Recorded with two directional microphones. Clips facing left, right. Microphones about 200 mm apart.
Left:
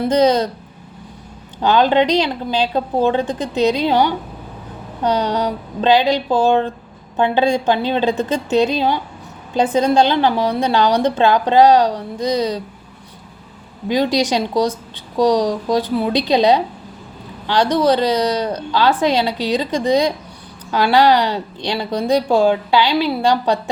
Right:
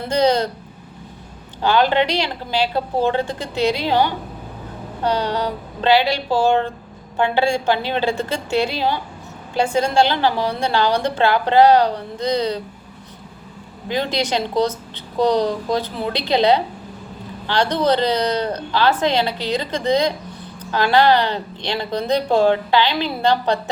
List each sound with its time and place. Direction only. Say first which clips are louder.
0.1 s a woman's voice: left 2 dB; 20° left (ahead or behind)
1.6 s a woman's voice: left 3 dB; 20° left (ahead or behind)
5.0 s a woman's voice: left 3 dB; 15° left (ahead or behind)
13.8 s a woman's voice: left 5 dB; 15° left (ahead or behind)